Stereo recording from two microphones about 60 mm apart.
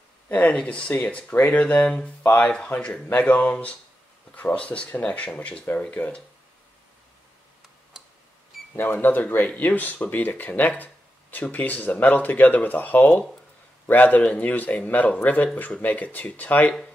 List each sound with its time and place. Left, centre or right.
0.3 s speech: left
2.7 s speech: left
8.7 s speech: left
10.8 s a sound: left
11.5 s speech: left